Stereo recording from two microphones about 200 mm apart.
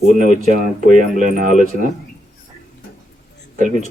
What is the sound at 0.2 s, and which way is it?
A man's voice, 40° right (ahead or behind).